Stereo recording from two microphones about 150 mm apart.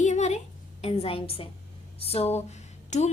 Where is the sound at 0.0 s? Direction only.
50° left (ahead or behind).